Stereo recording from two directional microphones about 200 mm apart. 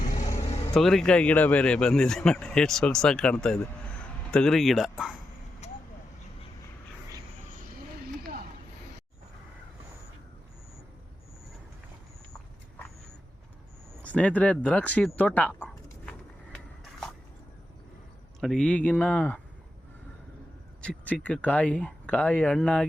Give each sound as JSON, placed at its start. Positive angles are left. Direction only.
{"t": 0.4, "sound": "vehicle", "side_deg": 30}
{"t": 0.7, "sound": "a man's voice", "side_deg": 0}
{"t": 5.6, "sound": "vehicle", "side_deg": 35}
{"t": 14.0, "sound": "speech", "side_deg": 5}
{"t": 18.3, "sound": "speech", "side_deg": 0}
{"t": 20.8, "sound": "speech", "side_deg": 5}